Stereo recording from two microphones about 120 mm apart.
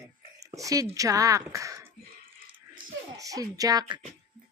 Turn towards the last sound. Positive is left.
turn(degrees=-35)  # may be behind; listen again after turning